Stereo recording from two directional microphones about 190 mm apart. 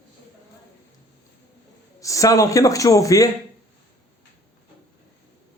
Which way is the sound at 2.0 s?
15° left (ahead or behind).